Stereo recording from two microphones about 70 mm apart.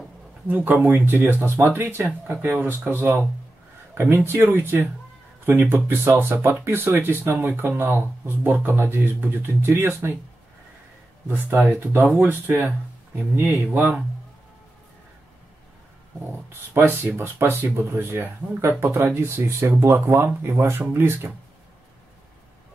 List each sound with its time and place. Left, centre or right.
0.5 s speech: right
11.3 s speech: right
16.7 s speech: right